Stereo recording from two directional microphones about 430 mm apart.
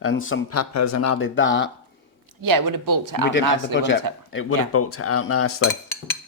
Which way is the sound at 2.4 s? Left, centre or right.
Right.